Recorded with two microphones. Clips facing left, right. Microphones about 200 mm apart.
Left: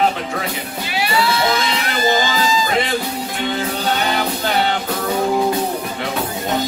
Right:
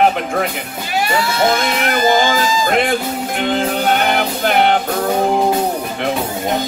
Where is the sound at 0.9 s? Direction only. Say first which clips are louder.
Right 2 dB; 45° right (ahead or behind).